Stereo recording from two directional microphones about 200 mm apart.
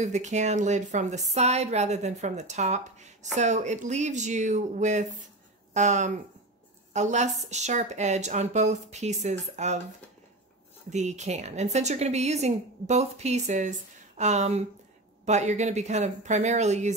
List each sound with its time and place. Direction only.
0.0 s a woman's voice: 35° right (ahead or behind)
10.9 s a woman's voice: 35° right (ahead or behind)